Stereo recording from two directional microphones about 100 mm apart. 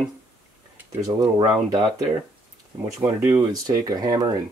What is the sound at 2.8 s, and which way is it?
Speech, 30° right (ahead or behind).